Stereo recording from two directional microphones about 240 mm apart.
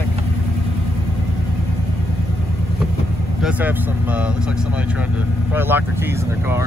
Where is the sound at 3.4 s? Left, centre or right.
Centre.